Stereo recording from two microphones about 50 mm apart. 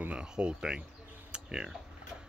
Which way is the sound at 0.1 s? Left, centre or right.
Right.